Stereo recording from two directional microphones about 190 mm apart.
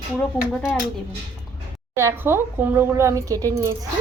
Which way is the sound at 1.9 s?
15° right (ahead or behind).